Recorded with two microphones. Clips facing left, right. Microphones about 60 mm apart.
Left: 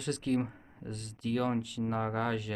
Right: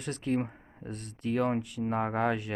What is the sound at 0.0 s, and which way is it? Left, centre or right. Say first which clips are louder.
Speech: even; right.